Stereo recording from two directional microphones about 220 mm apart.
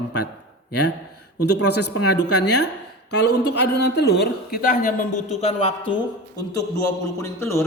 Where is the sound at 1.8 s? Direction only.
50° left (ahead or behind).